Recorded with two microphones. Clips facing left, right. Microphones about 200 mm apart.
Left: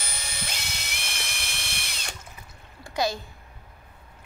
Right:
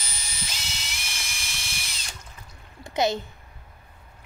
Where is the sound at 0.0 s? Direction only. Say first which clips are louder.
Left 3 dB; 60° left (ahead or behind).